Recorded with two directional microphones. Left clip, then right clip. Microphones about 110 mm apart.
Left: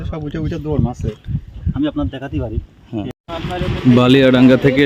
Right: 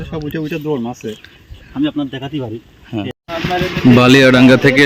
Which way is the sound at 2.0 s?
15° left (ahead or behind).